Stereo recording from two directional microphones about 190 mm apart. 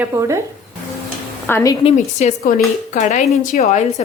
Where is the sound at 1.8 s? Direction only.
35° left (ahead or behind).